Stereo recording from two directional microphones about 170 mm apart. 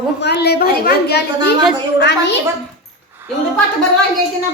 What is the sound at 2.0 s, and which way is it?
Speech, 90° left.